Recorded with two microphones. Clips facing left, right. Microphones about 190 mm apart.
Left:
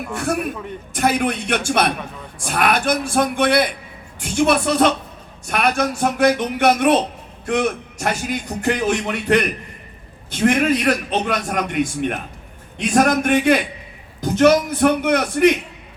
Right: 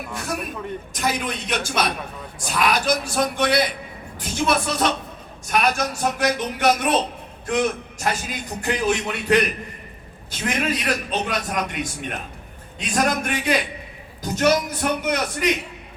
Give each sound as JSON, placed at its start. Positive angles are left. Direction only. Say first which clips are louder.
{"t": 0.2, "sound": "a man's voice", "louder": "left 7 dB", "side_deg": 60}